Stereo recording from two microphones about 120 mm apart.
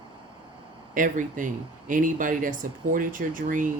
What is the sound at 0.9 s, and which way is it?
Speech, 90° right.